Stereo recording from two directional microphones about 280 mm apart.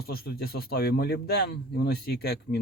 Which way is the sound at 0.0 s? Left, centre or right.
Left.